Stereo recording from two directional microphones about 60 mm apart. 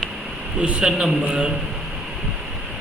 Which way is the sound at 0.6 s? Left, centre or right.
Centre.